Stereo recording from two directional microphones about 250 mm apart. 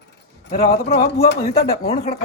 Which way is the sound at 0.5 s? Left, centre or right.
Left.